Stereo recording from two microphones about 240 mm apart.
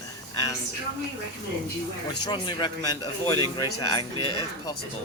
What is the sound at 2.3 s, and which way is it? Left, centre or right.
Speech, centre.